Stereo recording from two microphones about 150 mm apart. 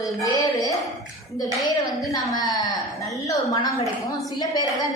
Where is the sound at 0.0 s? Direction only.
20° left (ahead or behind).